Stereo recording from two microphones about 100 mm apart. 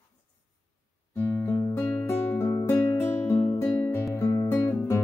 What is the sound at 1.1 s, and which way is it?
Music, 20° left (ahead or behind).